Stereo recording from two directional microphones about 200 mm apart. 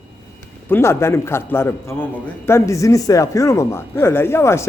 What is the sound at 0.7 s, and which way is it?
A man's voice, 15° left (ahead or behind).